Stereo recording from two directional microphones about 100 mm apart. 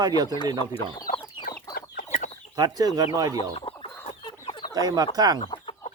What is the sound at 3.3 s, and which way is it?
Chicken, 70° left (ahead or behind).